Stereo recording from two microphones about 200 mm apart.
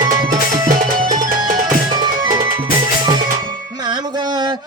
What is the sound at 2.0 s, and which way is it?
Music, 20° right (ahead or behind).